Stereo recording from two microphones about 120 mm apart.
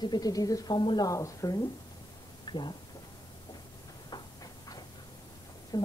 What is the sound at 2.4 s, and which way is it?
Speech, 40° left (ahead or behind).